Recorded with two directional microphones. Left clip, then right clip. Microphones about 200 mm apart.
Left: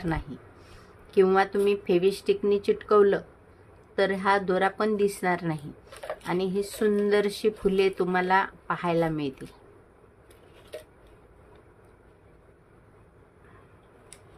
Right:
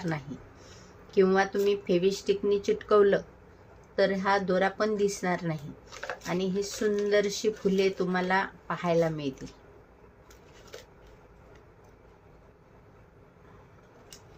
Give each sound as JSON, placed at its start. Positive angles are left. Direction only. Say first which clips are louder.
{"t": 1.1, "sound": "speech", "louder": "left 3 dB", "side_deg": 15}